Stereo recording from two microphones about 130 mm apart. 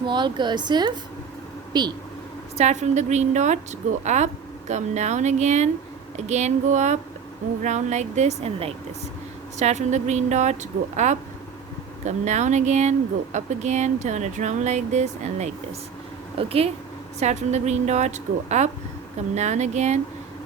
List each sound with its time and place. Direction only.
0.0 s a woman's voice: 35° right (ahead or behind)
2.6 s speech: 60° right (ahead or behind)
16.4 s speech: 50° right (ahead or behind)
17.2 s speech: 60° right (ahead or behind)